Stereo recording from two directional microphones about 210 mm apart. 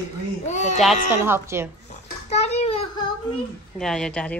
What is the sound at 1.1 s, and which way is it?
Speech, 10° right (ahead or behind).